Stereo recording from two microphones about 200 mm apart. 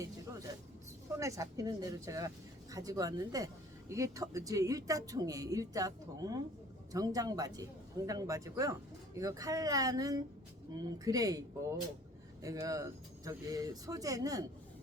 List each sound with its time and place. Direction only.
1.1 s speech: 15° right (ahead or behind)